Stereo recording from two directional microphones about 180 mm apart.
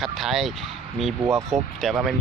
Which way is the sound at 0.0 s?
Centre (ahead or behind).